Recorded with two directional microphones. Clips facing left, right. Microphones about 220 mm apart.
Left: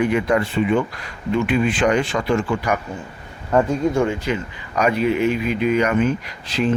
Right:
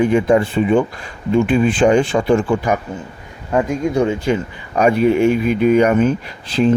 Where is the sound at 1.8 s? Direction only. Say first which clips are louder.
Right 6 dB; 25° right (ahead or behind).